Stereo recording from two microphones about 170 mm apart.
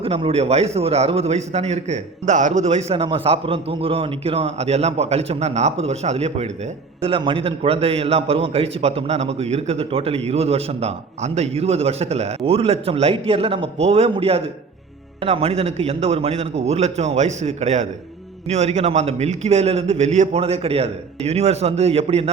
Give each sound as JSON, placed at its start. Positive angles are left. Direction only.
{"t": 0.0, "sound": "a man's voice", "side_deg": -35}